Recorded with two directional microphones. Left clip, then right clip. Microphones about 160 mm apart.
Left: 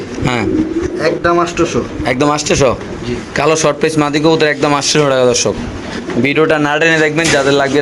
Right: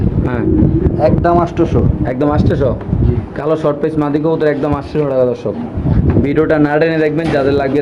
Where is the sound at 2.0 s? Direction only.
15° left (ahead or behind).